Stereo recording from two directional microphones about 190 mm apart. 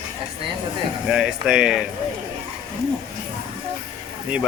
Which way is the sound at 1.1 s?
5° right (ahead or behind).